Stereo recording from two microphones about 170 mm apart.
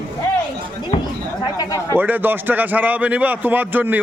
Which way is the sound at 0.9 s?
40° left (ahead or behind).